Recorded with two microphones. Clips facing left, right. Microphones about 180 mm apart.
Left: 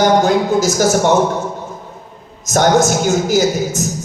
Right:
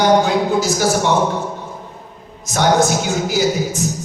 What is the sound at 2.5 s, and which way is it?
Speech, 45° left (ahead or behind).